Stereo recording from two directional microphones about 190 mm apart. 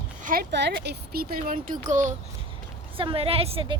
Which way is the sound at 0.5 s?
65° right (ahead or behind).